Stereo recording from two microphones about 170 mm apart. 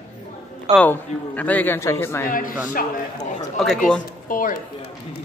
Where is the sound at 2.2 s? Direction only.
55° left (ahead or behind).